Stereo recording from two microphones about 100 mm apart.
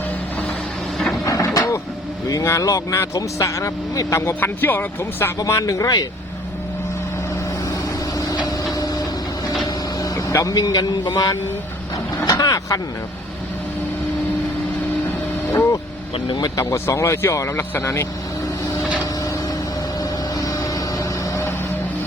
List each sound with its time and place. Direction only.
1.2 s a sound: 35° left (ahead or behind)
1.5 s vehicle: 30° left (ahead or behind)
2.2 s speech: 30° left (ahead or behind)
4.4 s speech: 20° left (ahead or behind)
5.5 s speech: 30° left (ahead or behind)
8.1 s a sound: 40° left (ahead or behind)
10.0 s speech: 35° left (ahead or behind)
12.2 s a sound: 35° left (ahead or behind)
16.1 s speech: 50° left (ahead or behind)
16.6 s speech: 30° left (ahead or behind)
18.8 s vehicle: centre (ahead or behind)
20.0 s vehicle: 35° left (ahead or behind)